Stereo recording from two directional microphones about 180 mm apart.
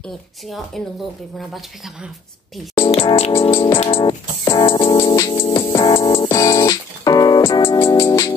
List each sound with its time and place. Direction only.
2.8 s music: 30° left (ahead or behind)